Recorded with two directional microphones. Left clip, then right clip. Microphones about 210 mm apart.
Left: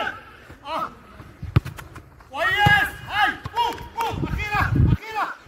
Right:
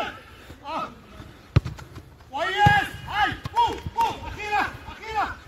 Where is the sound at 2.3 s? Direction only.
45° left (ahead or behind).